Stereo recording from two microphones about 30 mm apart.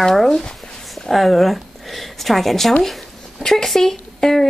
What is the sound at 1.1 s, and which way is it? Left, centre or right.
A woman's voice, centre.